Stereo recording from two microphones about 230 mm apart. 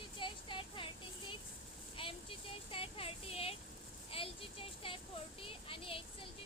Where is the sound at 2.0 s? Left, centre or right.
Left.